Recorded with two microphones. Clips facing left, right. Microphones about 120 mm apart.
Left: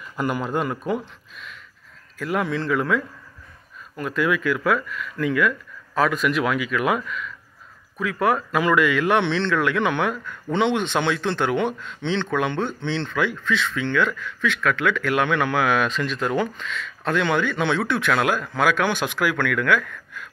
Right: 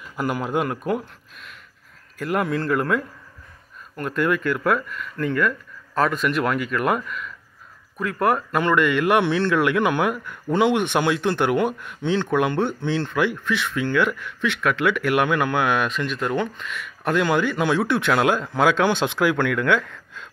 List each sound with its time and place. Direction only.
0.1 s speech: 5° right (ahead or behind); by 20.2 s 25° right (ahead or behind)